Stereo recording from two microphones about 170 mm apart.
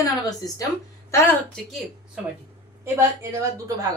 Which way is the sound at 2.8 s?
15° right (ahead or behind).